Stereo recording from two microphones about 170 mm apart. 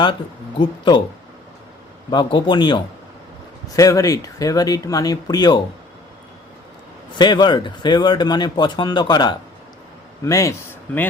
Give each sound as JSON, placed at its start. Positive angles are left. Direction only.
{"t": 0.6, "sound": "speech", "side_deg": 25}
{"t": 2.0, "sound": "speech", "side_deg": 25}
{"t": 7.1, "sound": "speech", "side_deg": 25}